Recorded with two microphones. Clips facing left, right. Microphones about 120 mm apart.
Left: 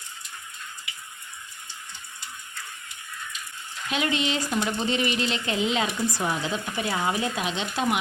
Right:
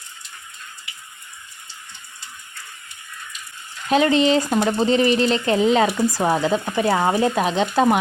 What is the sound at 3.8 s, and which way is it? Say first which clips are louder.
Speech: right 10 dB; 35° right (ahead or behind).